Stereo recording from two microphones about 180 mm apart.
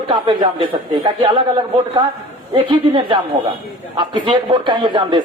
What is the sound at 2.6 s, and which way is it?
Speech, 25° right (ahead or behind).